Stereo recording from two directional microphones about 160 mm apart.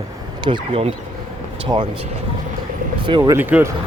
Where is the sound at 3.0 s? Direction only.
30° right (ahead or behind).